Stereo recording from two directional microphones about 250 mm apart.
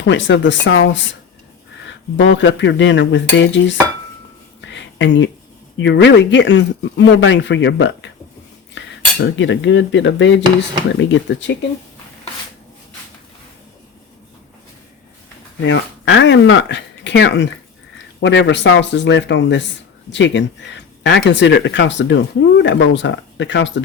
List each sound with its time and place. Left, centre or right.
0.1 s speech: left
2.1 s speech: left
4.6 s a sound: left
5.8 s speech: left
8.8 s cutlery: left
9.2 s speech: left
15.6 s speech: left